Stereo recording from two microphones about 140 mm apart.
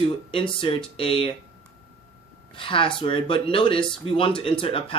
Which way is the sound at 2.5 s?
35° left (ahead or behind).